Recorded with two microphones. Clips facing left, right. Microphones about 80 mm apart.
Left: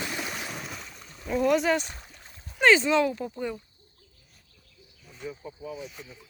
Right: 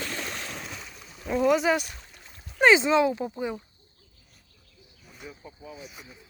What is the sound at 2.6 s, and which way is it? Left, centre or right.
Speech, centre.